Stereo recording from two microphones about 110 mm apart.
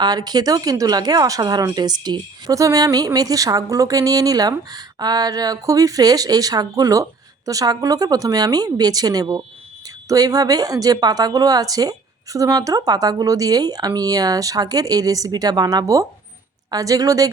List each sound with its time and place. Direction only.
0.0 s speech: 35° right (ahead or behind)